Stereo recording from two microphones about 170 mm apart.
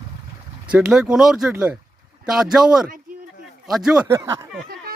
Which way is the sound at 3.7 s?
5° right (ahead or behind).